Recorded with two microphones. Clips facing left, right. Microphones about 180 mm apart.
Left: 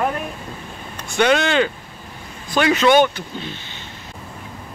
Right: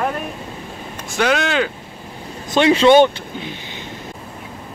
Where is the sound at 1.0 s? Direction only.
Centre (ahead or behind).